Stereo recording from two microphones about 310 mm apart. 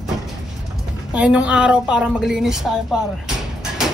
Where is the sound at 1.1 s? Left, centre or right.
Centre.